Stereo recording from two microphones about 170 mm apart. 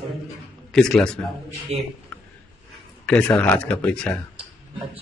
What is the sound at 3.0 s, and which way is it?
Speech, 5° left (ahead or behind).